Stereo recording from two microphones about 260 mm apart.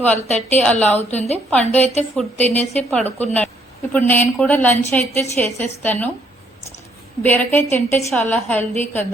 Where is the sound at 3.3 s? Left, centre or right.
Centre.